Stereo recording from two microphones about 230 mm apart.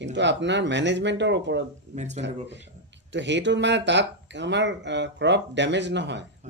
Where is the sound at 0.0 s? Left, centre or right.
Right.